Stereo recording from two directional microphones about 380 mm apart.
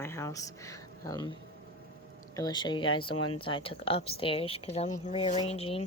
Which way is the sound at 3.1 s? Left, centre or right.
Left.